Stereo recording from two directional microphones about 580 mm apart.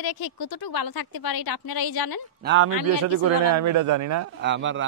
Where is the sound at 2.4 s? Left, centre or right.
Centre.